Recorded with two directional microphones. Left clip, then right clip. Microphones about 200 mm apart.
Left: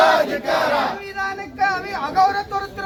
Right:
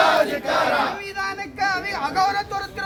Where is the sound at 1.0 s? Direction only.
10° right (ahead or behind).